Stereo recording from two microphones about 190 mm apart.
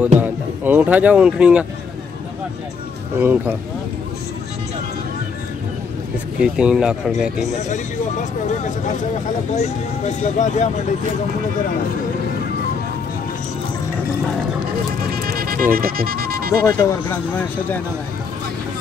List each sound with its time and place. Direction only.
0.2 s speech: 10° right (ahead or behind)
3.2 s speech: 10° right (ahead or behind)
6.4 s speech: 5° right (ahead or behind)
7.7 s speech: 40° left (ahead or behind)
15.1 s music: 50° right (ahead or behind)
16.6 s speech: 10° left (ahead or behind)